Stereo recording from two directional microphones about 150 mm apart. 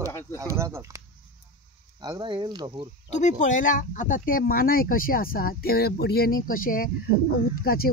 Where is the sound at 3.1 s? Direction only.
55° left (ahead or behind); by 6.4 s 90° left.